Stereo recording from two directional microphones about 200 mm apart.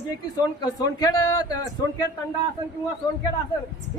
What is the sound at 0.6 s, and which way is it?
Speech, 20° left (ahead or behind).